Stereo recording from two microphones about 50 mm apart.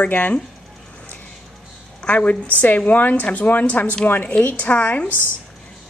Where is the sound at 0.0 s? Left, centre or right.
Left.